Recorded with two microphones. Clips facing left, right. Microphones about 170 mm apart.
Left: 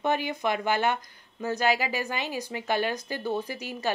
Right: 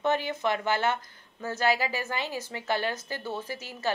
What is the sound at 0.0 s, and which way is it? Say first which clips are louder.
A woman's voice: even; 15° left (ahead or behind).